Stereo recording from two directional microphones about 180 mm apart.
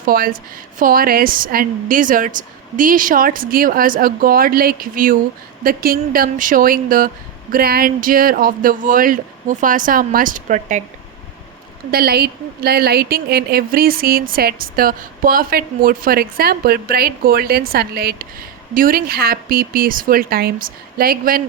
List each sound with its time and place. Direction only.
0.0 s speech: 55° right (ahead or behind)
11.9 s a woman's voice: 55° right (ahead or behind)